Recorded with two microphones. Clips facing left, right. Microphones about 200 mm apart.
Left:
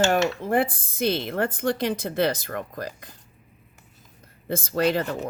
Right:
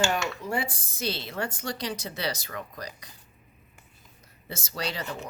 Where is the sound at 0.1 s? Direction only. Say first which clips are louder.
Left 7 dB; 55° left (ahead or behind).